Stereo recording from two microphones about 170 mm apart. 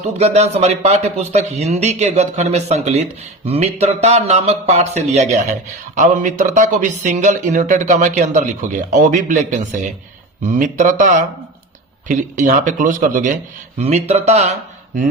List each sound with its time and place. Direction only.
0.0 s speech: 40° right (ahead or behind)
13.7 s speech: 40° right (ahead or behind)